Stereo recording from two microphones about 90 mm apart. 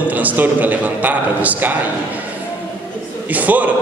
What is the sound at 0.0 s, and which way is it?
A man's voice, 15° right (ahead or behind).